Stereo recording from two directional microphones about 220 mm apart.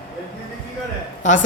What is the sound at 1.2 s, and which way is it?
Speech, 35° left (ahead or behind).